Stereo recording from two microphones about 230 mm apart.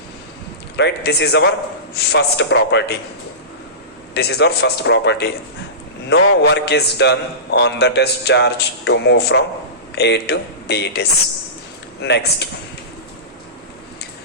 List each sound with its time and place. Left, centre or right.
0.8 s a man's voice: left
4.1 s a man's voice: left
12.0 s a man's voice: left